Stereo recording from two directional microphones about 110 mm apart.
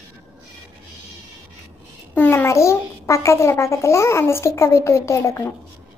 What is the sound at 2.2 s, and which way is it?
Speech, 20° left (ahead or behind).